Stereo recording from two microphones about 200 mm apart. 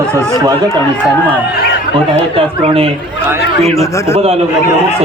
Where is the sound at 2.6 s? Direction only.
30° right (ahead or behind).